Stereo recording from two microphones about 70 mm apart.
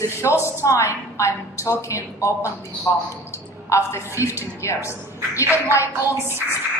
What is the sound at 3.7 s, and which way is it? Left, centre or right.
A woman's voice, left.